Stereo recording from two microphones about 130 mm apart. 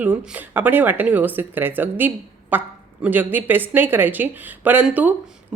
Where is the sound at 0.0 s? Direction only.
15° right (ahead or behind).